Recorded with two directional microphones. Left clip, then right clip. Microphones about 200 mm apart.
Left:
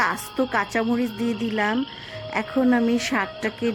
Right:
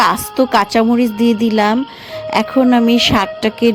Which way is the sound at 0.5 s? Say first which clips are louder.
Right 11 dB; 20° right (ahead or behind).